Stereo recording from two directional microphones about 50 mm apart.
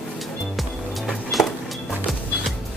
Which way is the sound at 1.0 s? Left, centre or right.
Centre.